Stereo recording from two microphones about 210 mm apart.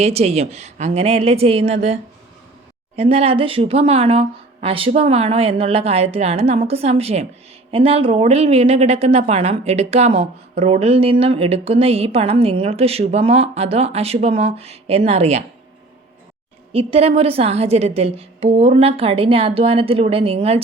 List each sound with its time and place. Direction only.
0.0 s a woman's voice: 30° right (ahead or behind)
16.7 s a woman's voice: 30° right (ahead or behind)